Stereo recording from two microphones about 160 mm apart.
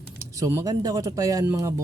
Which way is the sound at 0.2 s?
20° right (ahead or behind).